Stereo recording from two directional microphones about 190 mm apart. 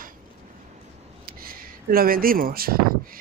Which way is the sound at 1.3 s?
50° right (ahead or behind).